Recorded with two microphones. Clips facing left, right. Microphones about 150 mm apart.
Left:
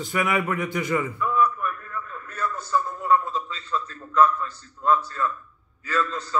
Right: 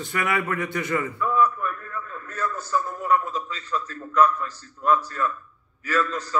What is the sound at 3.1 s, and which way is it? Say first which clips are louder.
A man's voice: left 1 dB; 25° left (ahead or behind).